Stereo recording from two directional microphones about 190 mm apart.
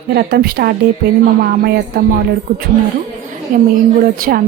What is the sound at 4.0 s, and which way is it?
Speech, 50° right (ahead or behind).